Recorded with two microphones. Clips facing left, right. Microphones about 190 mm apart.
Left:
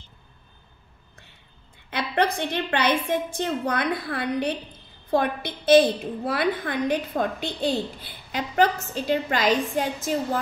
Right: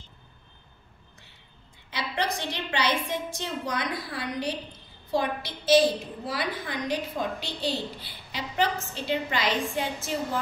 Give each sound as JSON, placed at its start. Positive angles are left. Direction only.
{"t": 1.9, "sound": "a woman's voice", "side_deg": 55}